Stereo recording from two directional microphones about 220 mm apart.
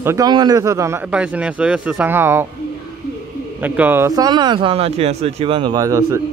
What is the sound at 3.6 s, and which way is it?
Speech, 10° right (ahead or behind).